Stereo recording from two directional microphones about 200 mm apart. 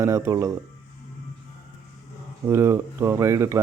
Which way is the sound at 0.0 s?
15° right (ahead or behind).